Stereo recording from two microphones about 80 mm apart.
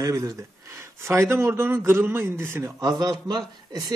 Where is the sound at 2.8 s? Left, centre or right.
Right.